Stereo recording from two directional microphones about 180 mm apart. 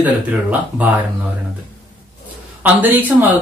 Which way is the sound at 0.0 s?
10° right (ahead or behind).